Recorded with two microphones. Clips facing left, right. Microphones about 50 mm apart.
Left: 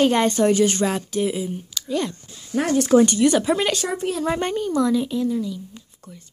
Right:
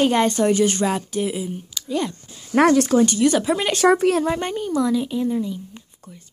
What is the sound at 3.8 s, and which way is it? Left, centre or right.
Speech, right.